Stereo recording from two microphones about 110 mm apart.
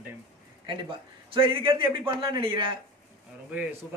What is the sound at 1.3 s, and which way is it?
A man's voice, 50° right (ahead or behind).